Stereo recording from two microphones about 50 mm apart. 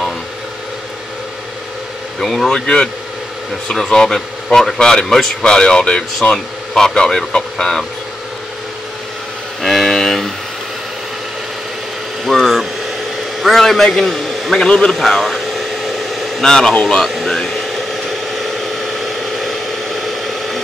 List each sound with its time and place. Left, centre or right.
2.1 s speech: centre
2.5 s speech: centre
9.6 s a sound: centre
12.3 s vehicle: centre
13.4 s a man's voice: centre
14.7 s speech: centre
15.0 s a sound: centre
16.4 s speech: centre
17.0 s air conditioning: centre
18.3 s a sound: centre